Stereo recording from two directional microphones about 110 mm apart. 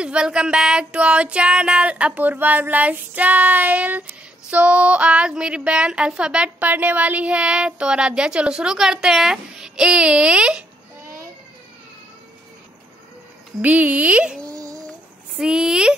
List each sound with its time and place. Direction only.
0.0 s speech: 10° right (ahead or behind)
13.6 s speech: 15° right (ahead or behind)
14.4 s a sound: 30° right (ahead or behind)
15.3 s speech: 5° right (ahead or behind)